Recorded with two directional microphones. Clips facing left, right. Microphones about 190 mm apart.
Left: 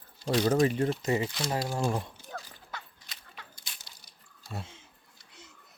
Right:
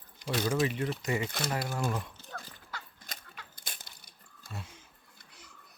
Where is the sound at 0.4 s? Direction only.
40° left (ahead or behind).